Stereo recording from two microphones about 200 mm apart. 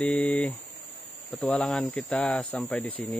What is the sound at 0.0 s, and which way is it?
Speech, 5° left (ahead or behind).